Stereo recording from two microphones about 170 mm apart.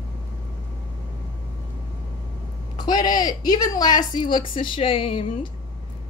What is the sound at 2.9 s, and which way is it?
A woman's voice, 25° left (ahead or behind).